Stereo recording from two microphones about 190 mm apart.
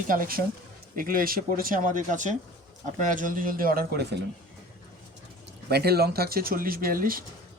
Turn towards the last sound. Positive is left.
turn(degrees=-45)  # may be behind; listen again after turning